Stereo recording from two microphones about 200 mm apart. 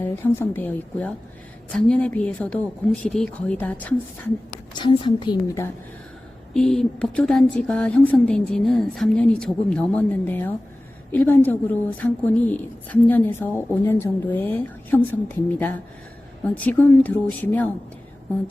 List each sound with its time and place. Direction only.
0.0 s a woman's voice: 10° left (ahead or behind)
4.7 s a woman's voice: 25° left (ahead or behind)
6.5 s a woman's voice: 5° left (ahead or behind)